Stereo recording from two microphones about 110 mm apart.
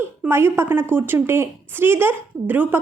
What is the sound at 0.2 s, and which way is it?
A woman's voice, 20° right (ahead or behind).